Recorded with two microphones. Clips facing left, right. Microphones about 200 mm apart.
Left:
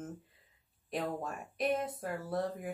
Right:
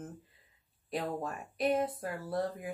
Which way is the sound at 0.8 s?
Centre (ahead or behind).